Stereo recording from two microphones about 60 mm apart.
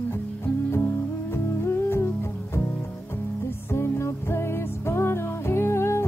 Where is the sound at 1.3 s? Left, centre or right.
Left.